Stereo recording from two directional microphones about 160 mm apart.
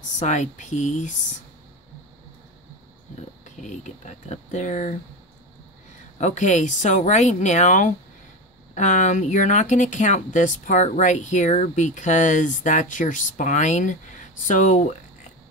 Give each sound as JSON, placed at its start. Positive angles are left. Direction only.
{"t": 0.2, "sound": "speech", "side_deg": 50}
{"t": 3.4, "sound": "speech", "side_deg": 50}
{"t": 6.1, "sound": "speech", "side_deg": 45}